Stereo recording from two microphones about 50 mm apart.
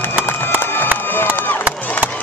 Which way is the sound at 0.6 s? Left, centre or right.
Left.